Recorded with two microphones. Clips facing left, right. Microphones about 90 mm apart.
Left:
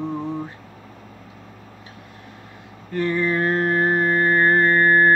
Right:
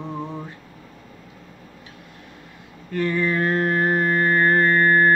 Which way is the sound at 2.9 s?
25° left (ahead or behind).